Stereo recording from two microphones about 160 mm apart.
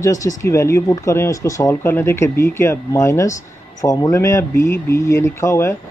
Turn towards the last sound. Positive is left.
turn(degrees=15)  # may be behind; listen again after turning